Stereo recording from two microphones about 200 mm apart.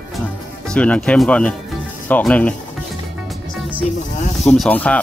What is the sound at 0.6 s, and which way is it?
Speech, 5° left (ahead or behind).